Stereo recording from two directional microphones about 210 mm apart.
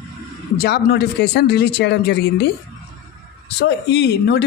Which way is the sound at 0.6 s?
50° left (ahead or behind).